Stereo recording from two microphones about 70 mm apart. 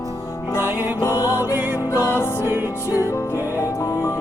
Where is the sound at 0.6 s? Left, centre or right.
Right.